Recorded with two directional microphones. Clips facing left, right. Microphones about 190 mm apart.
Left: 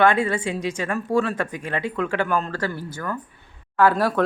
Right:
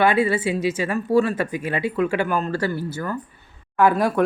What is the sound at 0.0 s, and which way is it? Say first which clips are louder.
Speech: right 1 dB; 5° right (ahead or behind).